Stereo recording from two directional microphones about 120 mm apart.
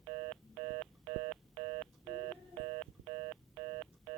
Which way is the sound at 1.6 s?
45° right (ahead or behind).